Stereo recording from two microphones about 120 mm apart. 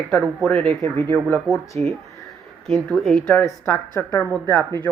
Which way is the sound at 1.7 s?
55° right (ahead or behind).